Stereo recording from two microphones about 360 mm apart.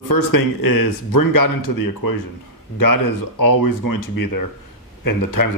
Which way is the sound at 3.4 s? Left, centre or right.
Left.